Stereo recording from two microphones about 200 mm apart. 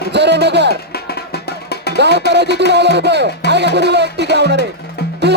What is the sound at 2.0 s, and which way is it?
Speech, 60° right (ahead or behind).